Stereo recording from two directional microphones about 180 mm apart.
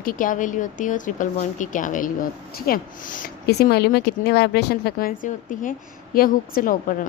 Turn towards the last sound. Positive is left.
turn(degrees=50)  # may be behind; listen again after turning